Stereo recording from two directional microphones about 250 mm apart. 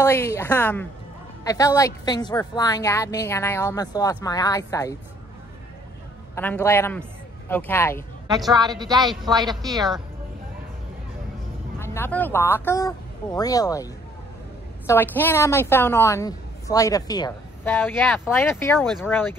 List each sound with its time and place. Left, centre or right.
0.0 s a woman's voice: centre
6.3 s a man's voice: centre
8.5 s speech: centre
11.8 s a woman's voice: centre
14.9 s a woman's voice: centre